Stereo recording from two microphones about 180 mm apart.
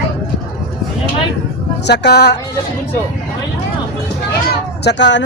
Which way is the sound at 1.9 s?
65° left (ahead or behind).